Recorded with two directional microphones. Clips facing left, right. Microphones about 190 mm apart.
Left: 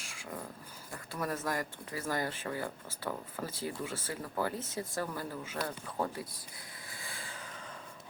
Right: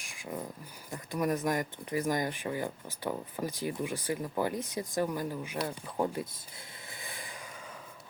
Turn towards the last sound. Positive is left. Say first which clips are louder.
# right 2 dB
turn(degrees=-20)  # may be behind; listen again after turning